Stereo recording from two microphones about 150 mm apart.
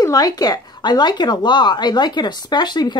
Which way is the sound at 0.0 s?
25° left (ahead or behind).